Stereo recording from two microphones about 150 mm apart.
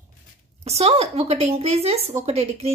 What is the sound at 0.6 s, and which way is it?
A woman's voice, 45° right (ahead or behind).